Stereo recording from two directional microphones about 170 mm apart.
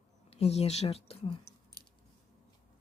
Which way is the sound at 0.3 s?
40° left (ahead or behind).